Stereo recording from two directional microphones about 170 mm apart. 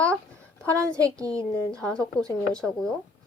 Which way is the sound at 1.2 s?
20° right (ahead or behind).